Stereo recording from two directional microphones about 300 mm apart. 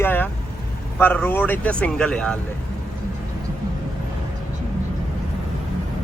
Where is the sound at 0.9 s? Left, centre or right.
Centre.